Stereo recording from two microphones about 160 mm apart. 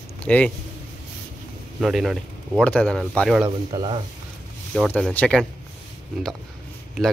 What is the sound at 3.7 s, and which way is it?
Speech, 25° right (ahead or behind).